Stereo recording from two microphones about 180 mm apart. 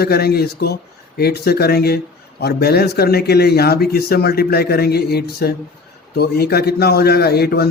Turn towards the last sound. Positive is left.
turn(degrees=60)  # may be behind; listen again after turning